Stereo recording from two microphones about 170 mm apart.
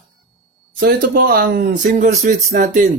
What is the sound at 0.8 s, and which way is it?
Speech, 65° right (ahead or behind).